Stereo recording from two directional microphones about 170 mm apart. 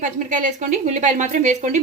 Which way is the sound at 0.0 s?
50° right (ahead or behind).